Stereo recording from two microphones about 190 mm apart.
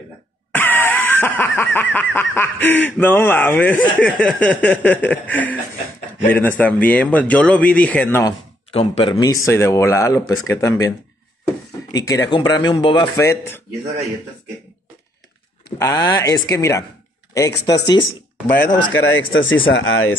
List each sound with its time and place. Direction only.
0.5 s a sound: 10° left (ahead or behind)
4.0 s speech: 5° left (ahead or behind)
8.7 s speech: 30° left (ahead or behind)
9.1 s speech: 20° left (ahead or behind)
13.2 s speech: 15° left (ahead or behind)
15.8 s speech: 20° left (ahead or behind)
18.9 s speech: 85° left